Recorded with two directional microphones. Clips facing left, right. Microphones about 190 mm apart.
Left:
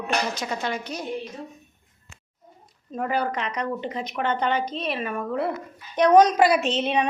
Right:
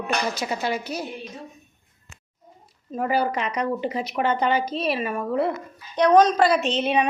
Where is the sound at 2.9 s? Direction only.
5° right (ahead or behind).